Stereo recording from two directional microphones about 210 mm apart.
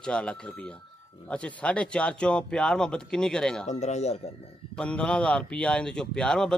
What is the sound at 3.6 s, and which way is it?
Speech, 35° left (ahead or behind).